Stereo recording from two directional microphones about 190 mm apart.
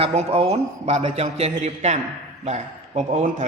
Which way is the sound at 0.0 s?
30° right (ahead or behind).